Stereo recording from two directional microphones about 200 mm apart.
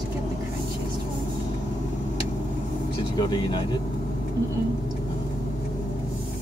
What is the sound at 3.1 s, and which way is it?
Speech, 20° left (ahead or behind).